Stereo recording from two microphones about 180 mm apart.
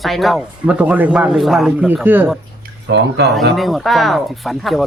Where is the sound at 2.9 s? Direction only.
75° right (ahead or behind).